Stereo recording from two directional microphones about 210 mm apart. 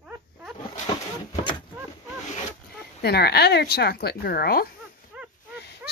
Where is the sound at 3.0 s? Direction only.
50° left (ahead or behind).